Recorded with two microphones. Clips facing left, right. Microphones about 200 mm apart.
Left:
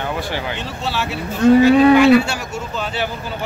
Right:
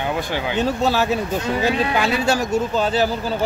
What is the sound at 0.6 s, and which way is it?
Speech, 40° right (ahead or behind).